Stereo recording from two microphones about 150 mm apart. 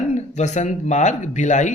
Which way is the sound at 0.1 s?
50° left (ahead or behind).